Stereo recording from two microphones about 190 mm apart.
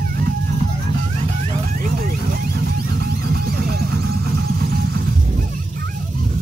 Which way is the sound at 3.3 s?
55° right (ahead or behind).